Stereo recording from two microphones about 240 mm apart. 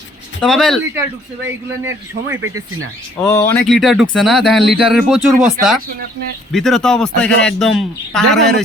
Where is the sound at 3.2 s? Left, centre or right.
Centre.